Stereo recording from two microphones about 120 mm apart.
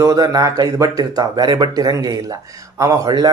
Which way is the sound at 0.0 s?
30° right (ahead or behind).